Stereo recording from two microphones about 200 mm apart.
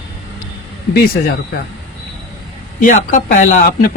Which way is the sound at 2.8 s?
40° left (ahead or behind).